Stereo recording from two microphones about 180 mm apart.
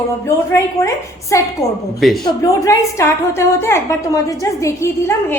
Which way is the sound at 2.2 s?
20° left (ahead or behind).